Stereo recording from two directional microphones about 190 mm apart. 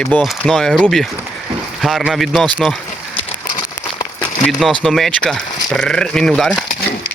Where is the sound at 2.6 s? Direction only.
Centre (ahead or behind).